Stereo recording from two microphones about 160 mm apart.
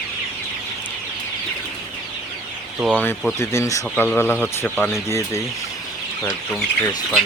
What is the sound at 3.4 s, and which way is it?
Speech, 15° left (ahead or behind).